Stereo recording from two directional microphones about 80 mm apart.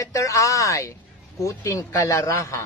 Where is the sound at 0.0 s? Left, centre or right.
Left.